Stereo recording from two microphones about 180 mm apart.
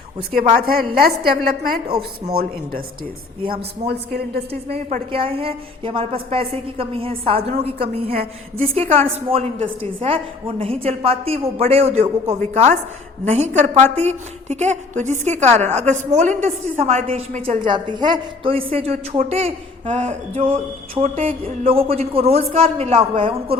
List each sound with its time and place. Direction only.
0.3 s a woman's voice: 50° right (ahead or behind)
5.1 s a woman's voice: 30° right (ahead or behind)
13.2 s a woman's voice: 40° right (ahead or behind)
17.6 s a woman's voice: 25° right (ahead or behind)
20.4 s a woman's voice: 30° right (ahead or behind)